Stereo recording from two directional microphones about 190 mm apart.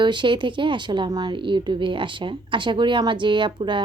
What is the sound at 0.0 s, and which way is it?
A woman's voice, 25° right (ahead or behind).